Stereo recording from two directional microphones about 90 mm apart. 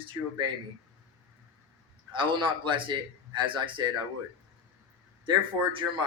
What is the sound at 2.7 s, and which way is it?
Speech, 65° right (ahead or behind).